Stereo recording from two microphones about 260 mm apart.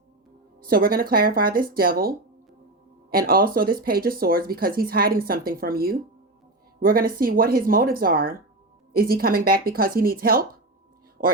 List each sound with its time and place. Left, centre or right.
0.6 s speech: right